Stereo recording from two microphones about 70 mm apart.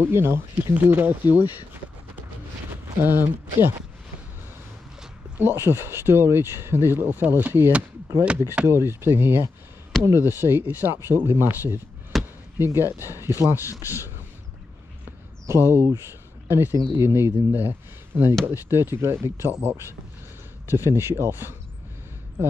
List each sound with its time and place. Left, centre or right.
0.0 s speech: right
2.7 s a sound: right
5.4 s speech: right
12.1 s basketball bounce: centre
12.5 s speech: right
13.7 s a man's voice: left
13.9 s a sound: right
15.4 s speech: right